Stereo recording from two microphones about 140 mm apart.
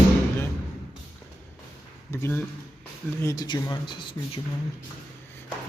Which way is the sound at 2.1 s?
20° left (ahead or behind).